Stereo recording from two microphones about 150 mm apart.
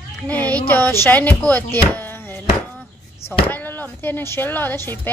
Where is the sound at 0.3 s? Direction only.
10° left (ahead or behind).